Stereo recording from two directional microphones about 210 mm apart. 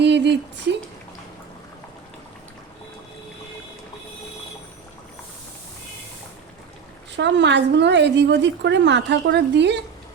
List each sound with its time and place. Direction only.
0.0 s speech: 55° right (ahead or behind)
7.2 s a woman's voice: 55° right (ahead or behind)